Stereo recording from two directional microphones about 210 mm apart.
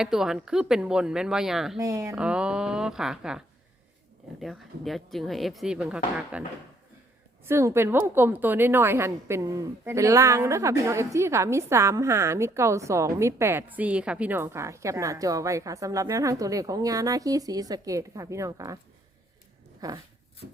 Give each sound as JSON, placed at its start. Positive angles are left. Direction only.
{"t": 0.0, "sound": "speech", "side_deg": 0}
{"t": 1.8, "sound": "a woman's voice", "side_deg": -15}
{"t": 2.2, "sound": "speech", "side_deg": -5}
{"t": 7.4, "sound": "a woman's voice", "side_deg": -10}
{"t": 19.8, "sound": "a woman's voice", "side_deg": -15}